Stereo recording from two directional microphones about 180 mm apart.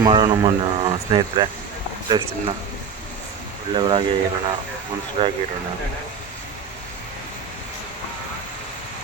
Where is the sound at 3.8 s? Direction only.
30° right (ahead or behind).